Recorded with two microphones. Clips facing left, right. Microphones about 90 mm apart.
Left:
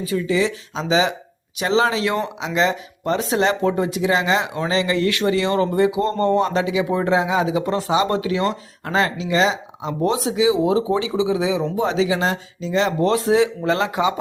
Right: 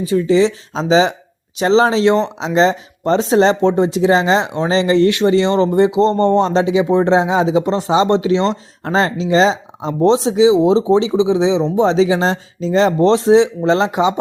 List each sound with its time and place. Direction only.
0.2 s speech: 30° right (ahead or behind)